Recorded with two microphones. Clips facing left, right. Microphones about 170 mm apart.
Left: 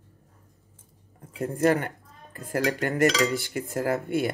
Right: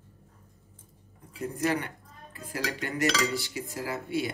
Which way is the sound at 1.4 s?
50° left (ahead or behind).